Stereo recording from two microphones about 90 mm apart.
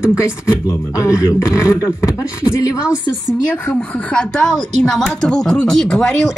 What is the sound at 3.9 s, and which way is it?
A woman's voice, 10° left (ahead or behind).